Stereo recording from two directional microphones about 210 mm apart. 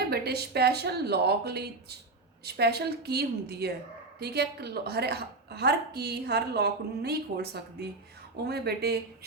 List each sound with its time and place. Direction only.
0.1 s a woman's voice: 50° right (ahead or behind)